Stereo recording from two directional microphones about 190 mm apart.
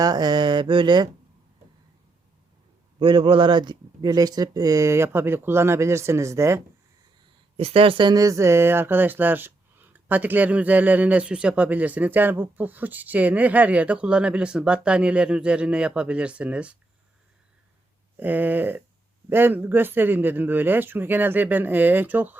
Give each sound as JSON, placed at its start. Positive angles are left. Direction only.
{"t": 0.0, "sound": "a sound", "side_deg": -20}
{"t": 3.0, "sound": "speech", "side_deg": -25}
{"t": 7.5, "sound": "speech", "side_deg": -30}
{"t": 18.2, "sound": "speech", "side_deg": -10}